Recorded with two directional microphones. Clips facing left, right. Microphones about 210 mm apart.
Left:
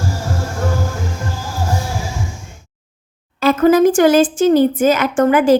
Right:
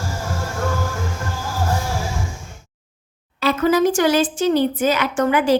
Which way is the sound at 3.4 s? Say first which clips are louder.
Left 6 dB; 50° left (ahead or behind).